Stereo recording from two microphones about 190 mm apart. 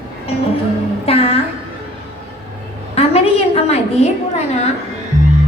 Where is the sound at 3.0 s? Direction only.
30° left (ahead or behind).